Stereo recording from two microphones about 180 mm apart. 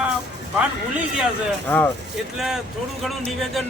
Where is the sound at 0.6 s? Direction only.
10° right (ahead or behind).